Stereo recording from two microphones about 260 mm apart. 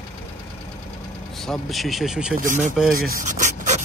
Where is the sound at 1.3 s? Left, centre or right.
Centre.